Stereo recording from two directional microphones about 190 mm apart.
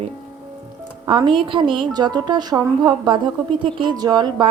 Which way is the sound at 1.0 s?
25° right (ahead or behind).